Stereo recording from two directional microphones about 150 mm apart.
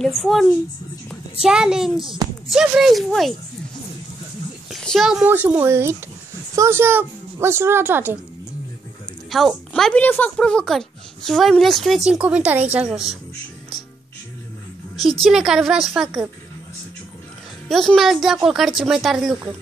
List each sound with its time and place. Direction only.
0.2 s speech: centre (ahead or behind)
4.6 s speech: centre (ahead or behind)
5.2 s a woman's voice: 10° right (ahead or behind)
9.3 s speech: centre (ahead or behind)
15.2 s speech: 5° right (ahead or behind)
17.6 s speech: centre (ahead or behind)